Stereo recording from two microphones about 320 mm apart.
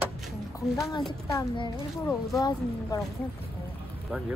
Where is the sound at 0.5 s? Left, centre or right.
Centre.